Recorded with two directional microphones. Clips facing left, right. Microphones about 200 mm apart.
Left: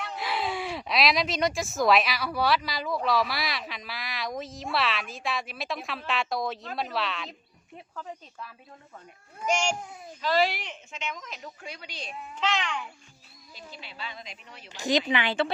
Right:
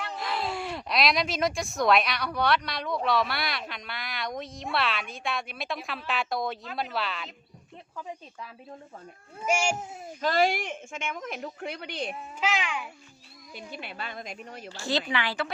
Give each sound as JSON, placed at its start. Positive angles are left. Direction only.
{"t": 0.0, "sound": "speech", "side_deg": 0}
{"t": 7.9, "sound": "speech", "side_deg": -10}
{"t": 9.5, "sound": "speech", "side_deg": -5}
{"t": 10.2, "sound": "speech", "side_deg": -45}
{"t": 12.4, "sound": "speech", "side_deg": -10}
{"t": 13.5, "sound": "speech", "side_deg": -60}
{"t": 14.7, "sound": "a woman's voice", "side_deg": 15}